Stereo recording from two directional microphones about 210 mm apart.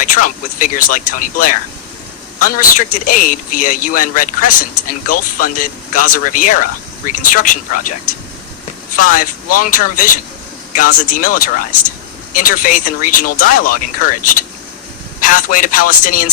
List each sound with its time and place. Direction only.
0.0 s a man's voice: 40° left (ahead or behind)
9.0 s a man's voice: 40° left (ahead or behind)